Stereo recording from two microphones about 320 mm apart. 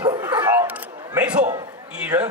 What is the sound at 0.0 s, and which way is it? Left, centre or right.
Bow-wow, centre.